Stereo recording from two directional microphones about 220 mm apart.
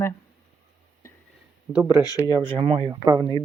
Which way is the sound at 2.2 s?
20° right (ahead or behind).